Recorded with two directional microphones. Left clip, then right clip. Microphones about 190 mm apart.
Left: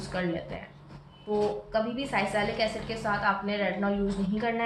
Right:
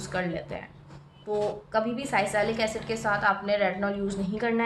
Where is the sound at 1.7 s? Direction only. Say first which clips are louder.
Right 2 dB; 50° right (ahead or behind).